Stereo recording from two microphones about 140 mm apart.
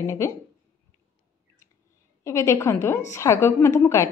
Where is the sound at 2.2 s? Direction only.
20° left (ahead or behind).